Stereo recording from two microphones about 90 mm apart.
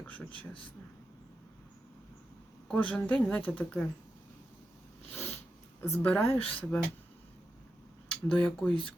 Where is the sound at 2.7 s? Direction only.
10° left (ahead or behind).